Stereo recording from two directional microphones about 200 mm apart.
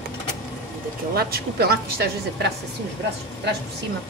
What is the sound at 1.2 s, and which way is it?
A woman's voice, 50° right (ahead or behind).